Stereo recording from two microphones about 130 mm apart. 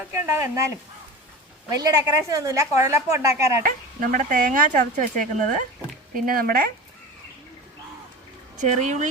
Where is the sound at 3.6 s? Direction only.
90° right.